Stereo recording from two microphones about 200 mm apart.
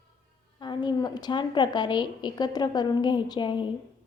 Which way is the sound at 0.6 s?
20° left (ahead or behind).